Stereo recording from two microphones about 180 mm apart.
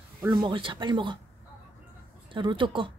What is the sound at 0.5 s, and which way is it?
Speech, 25° right (ahead or behind).